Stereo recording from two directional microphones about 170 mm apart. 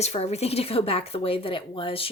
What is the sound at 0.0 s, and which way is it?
A woman's voice, 40° left (ahead or behind).